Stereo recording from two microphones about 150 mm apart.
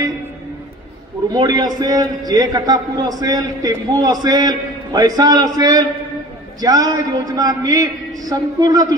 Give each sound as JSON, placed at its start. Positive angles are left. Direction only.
{"t": 1.3, "sound": "a man's voice", "side_deg": -25}